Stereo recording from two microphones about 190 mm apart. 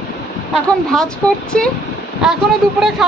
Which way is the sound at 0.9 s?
5° left (ahead or behind).